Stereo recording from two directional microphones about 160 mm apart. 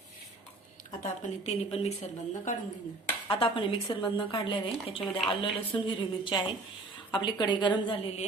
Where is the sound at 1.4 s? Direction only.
40° left (ahead or behind).